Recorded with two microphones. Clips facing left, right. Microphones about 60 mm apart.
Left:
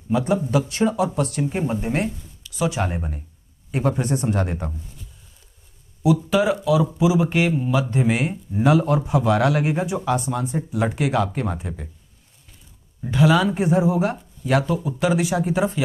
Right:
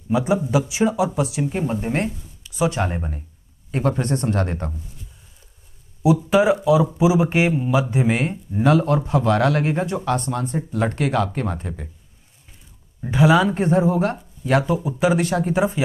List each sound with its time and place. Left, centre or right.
0.1 s speech: centre
1.5 s speech: centre
2.0 s a sound: right
2.7 s speech: centre
3.7 s speech: centre
6.3 s speech: right; by 8.7 s centre
8.7 s speech: centre
13.0 s speech: centre
13.6 s speech: centre
14.1 s speech: centre
15.1 s speech: centre